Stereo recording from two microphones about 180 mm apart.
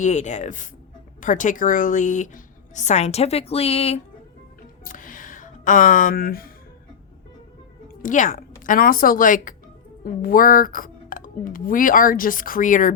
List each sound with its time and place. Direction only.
0.0 s speech: 40° left (ahead or behind)
4.8 s music: 50° left (ahead or behind)
8.0 s speech: 45° left (ahead or behind)